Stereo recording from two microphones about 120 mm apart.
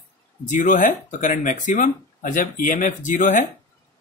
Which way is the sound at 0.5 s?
90° left.